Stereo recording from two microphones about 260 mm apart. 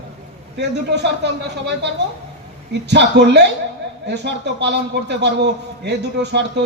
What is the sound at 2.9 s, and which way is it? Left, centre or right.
A man's voice, right.